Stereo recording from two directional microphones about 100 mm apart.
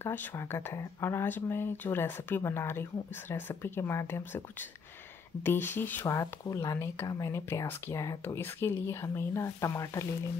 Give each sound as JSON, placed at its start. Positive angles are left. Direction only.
{"t": 0.0, "sound": "speech", "side_deg": 25}
{"t": 5.4, "sound": "speech", "side_deg": 20}
{"t": 8.4, "sound": "speech", "side_deg": 20}